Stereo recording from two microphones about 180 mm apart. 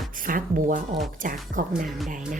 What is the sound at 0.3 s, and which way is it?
Speech, 50° right (ahead or behind).